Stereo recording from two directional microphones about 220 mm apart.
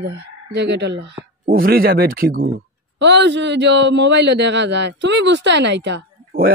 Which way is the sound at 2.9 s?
50° right (ahead or behind).